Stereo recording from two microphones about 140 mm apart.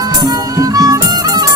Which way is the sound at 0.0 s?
25° right (ahead or behind).